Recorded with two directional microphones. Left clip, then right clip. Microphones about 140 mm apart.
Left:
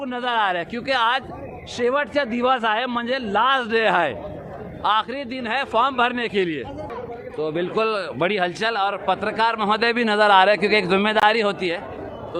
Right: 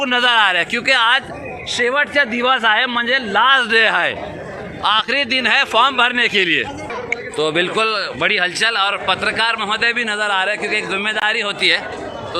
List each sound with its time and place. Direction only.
0.0 s speech: 5° right (ahead or behind)
0.9 s a man's voice: 25° left (ahead or behind)
1.7 s a man's voice: 40° left (ahead or behind); by 4.1 s 20° left (ahead or behind)
4.8 s speech: centre (ahead or behind)
5.7 s a man's voice: 20° left (ahead or behind)
6.3 s speech: centre (ahead or behind)
7.8 s a man's voice: 40° left (ahead or behind)
9.6 s a man's voice: 85° left